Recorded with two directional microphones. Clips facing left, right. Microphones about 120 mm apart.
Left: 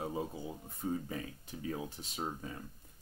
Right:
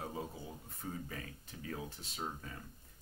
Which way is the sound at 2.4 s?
20° left (ahead or behind).